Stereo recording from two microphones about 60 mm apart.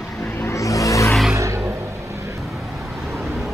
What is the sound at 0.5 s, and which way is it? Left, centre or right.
Vehicle, left.